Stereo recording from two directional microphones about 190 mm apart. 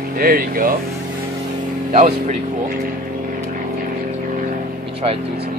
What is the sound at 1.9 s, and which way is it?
Speech, 35° right (ahead or behind).